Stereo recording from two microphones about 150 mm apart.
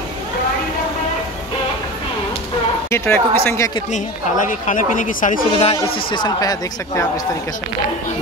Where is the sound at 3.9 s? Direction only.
60° left (ahead or behind).